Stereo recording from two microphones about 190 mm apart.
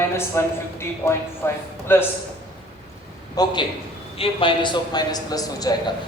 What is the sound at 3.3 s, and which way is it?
A man's voice, 25° left (ahead or behind).